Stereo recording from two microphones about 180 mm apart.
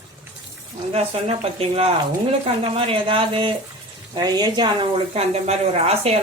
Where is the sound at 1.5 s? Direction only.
35° right (ahead or behind).